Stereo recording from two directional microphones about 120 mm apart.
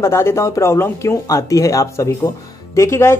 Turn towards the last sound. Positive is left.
turn(degrees=25)  # may be behind; listen again after turning